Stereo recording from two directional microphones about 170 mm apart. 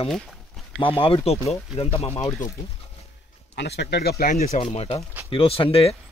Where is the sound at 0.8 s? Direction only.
35° left (ahead or behind).